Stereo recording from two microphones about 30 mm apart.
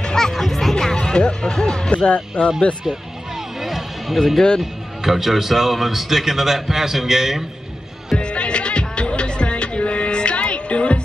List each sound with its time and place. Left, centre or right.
0.0 s music: left
0.3 s music: centre
0.9 s speech: left
1.9 s speech: left
3.6 s music: centre
4.6 s a man's voice: centre
8.2 s music: left